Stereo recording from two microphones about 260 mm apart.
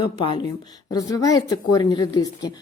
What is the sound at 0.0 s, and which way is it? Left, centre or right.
A woman's voice, centre.